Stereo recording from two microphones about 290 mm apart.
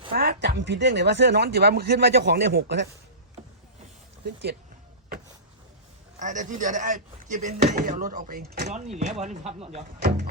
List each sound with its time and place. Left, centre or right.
0.1 s speech: right
6.1 s speech: right